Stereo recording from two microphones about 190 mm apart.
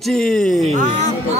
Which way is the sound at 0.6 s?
40° right (ahead or behind).